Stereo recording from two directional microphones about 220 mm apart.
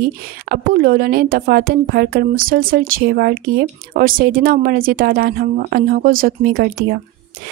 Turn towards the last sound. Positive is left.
turn(degrees=-45)  # may be behind; listen again after turning